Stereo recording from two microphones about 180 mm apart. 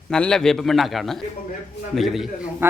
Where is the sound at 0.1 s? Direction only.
5° left (ahead or behind).